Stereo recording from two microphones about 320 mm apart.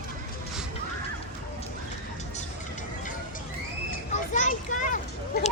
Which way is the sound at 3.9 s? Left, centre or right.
Left.